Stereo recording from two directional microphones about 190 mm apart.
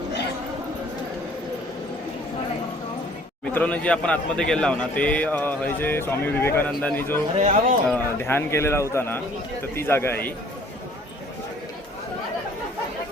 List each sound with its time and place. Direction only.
3.4 s a man's voice: 5° left (ahead or behind)
7.3 s speech: 40° right (ahead or behind)
7.9 s a man's voice: 10° left (ahead or behind)